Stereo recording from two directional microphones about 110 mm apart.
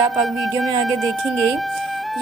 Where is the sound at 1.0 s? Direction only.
Centre (ahead or behind).